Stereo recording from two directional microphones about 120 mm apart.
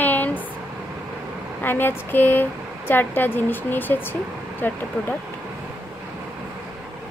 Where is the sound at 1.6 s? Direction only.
15° left (ahead or behind).